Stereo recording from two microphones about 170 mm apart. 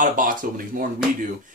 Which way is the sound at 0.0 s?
55° right (ahead or behind).